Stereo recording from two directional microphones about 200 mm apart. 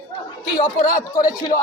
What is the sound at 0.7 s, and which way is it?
Speech, 45° left (ahead or behind).